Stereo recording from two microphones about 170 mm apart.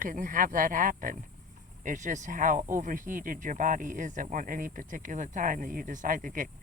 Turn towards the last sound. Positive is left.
turn(degrees=-50)  # may be behind; listen again after turning